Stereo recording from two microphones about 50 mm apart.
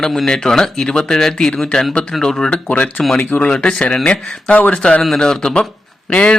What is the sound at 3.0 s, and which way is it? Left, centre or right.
Speech, centre.